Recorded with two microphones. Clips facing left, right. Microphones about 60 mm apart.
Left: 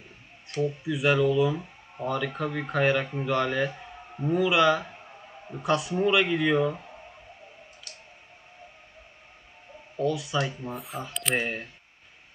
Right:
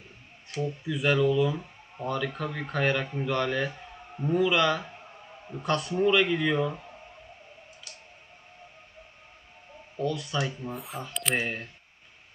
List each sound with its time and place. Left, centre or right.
0.6 s speech: centre
9.9 s speech: centre